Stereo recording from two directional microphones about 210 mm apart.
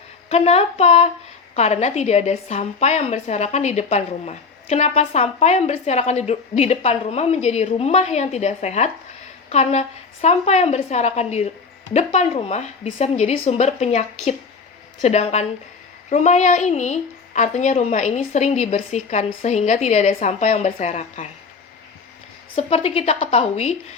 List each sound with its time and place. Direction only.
0.3 s a woman's voice: 30° left (ahead or behind)
22.5 s a woman's voice: 30° left (ahead or behind)